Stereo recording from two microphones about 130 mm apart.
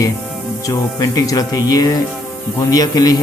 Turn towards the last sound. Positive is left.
turn(degrees=30)  # may be behind; listen again after turning